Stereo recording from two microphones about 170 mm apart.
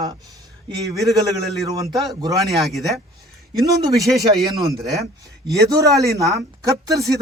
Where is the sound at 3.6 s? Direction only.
20° right (ahead or behind).